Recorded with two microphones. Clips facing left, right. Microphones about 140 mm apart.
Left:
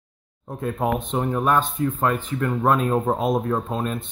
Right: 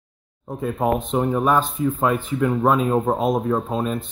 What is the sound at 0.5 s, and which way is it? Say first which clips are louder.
Speech: right 2 dB; centre (ahead or behind).